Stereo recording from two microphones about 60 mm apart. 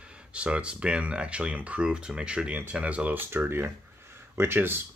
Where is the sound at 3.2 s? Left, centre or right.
Right.